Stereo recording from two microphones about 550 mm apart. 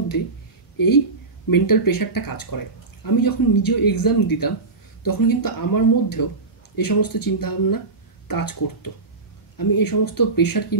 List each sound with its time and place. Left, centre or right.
0.7 s speech: left